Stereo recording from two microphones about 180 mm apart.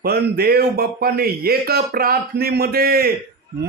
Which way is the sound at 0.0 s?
60° right (ahead or behind).